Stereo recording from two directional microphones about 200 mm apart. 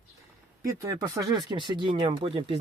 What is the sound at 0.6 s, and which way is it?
Speech, 15° right (ahead or behind).